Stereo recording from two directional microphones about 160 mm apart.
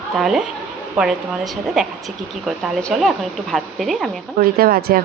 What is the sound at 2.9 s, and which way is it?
Speech, centre (ahead or behind).